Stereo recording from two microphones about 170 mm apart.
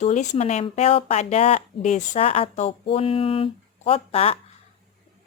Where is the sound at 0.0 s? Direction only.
45° left (ahead or behind).